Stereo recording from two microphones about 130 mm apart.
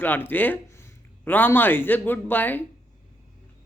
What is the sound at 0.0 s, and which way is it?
Speech, 15° left (ahead or behind).